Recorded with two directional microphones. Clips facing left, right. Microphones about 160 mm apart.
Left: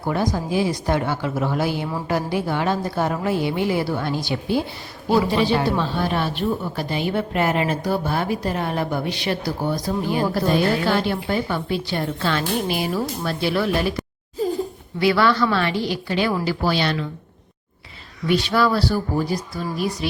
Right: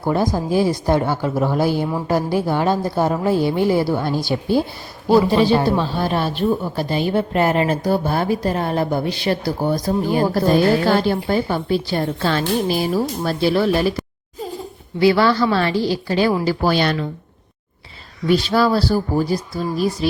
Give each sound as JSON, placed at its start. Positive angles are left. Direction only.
{"t": 0.1, "sound": "a man's voice", "side_deg": -35}
{"t": 14.9, "sound": "a man's voice", "side_deg": -30}
{"t": 18.3, "sound": "a man's voice", "side_deg": -35}